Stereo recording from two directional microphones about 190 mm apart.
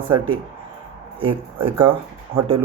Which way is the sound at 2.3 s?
50° right (ahead or behind).